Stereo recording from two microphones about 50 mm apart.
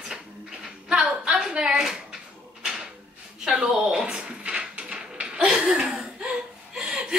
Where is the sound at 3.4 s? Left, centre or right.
Centre.